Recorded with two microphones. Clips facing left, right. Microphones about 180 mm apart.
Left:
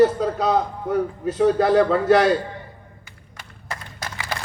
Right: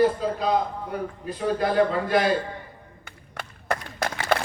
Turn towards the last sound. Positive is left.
turn(degrees=-60)  # may be behind; listen again after turning